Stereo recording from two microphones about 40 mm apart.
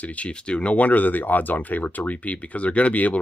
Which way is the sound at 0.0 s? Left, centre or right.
Left.